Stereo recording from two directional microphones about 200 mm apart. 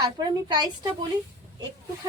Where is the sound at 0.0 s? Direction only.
20° right (ahead or behind).